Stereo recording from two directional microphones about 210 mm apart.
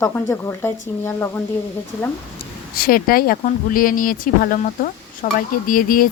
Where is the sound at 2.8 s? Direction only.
45° left (ahead or behind).